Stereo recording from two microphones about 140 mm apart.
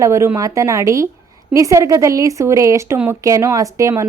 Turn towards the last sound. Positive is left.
turn(degrees=-20)  # may be behind; listen again after turning